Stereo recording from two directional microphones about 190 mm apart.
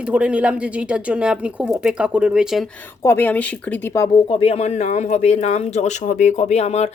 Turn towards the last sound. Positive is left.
turn(degrees=35)  # may be behind; listen again after turning